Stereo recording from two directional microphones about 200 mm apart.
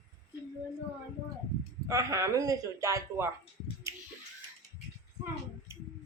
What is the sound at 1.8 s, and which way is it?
A man's voice, 15° right (ahead or behind).